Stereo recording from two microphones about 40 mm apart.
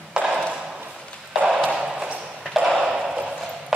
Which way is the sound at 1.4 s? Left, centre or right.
Right.